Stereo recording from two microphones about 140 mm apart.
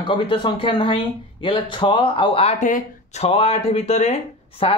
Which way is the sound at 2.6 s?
60° left (ahead or behind).